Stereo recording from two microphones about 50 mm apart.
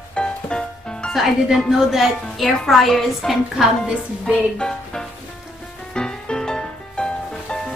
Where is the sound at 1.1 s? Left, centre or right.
Centre.